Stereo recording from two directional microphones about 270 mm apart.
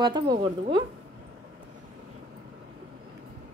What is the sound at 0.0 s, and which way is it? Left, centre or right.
Speech, centre.